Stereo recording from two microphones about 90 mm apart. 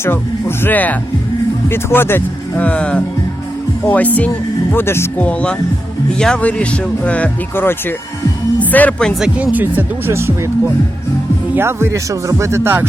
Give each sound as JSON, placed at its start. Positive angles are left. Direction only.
{"t": 0.0, "sound": "speech", "side_deg": 25}
{"t": 2.6, "sound": "speech", "side_deg": 15}
{"t": 5.2, "sound": "speech", "side_deg": 10}
{"t": 9.1, "sound": "speech", "side_deg": -10}
{"t": 10.1, "sound": "speech", "side_deg": -30}
{"t": 11.5, "sound": "speech", "side_deg": -30}